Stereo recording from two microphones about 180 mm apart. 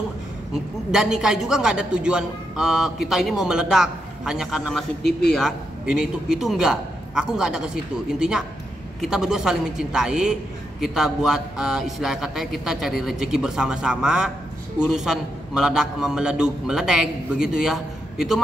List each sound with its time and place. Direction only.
0.9 s a man's voice: 5° right (ahead or behind)